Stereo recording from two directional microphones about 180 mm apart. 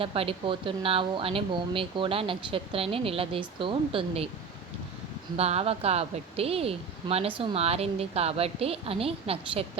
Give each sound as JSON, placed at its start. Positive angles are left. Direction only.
{"t": 0.0, "sound": "speech", "side_deg": -30}
{"t": 5.4, "sound": "speech", "side_deg": -35}